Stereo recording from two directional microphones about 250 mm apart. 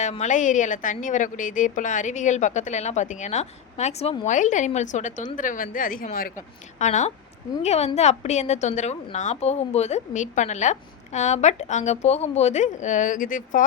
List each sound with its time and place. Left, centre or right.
0.0 s a woman's voice: left